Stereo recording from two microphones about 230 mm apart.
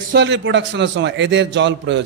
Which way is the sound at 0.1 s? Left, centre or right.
Right.